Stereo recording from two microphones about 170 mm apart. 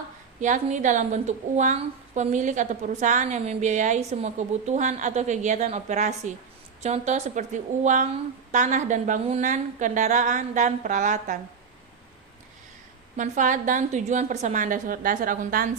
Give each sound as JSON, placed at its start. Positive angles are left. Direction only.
{"t": 0.3, "sound": "a woman's voice", "side_deg": -45}
{"t": 13.1, "sound": "a woman's voice", "side_deg": -50}